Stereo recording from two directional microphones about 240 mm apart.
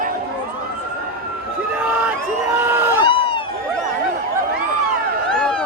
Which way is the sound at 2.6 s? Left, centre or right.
Centre.